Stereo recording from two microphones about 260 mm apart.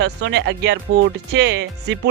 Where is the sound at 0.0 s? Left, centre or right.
Right.